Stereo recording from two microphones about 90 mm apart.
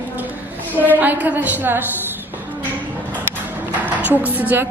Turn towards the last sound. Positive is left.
turn(degrees=-20)  # may be behind; listen again after turning